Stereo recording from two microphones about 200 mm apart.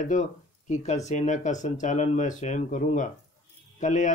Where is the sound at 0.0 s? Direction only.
40° left (ahead or behind).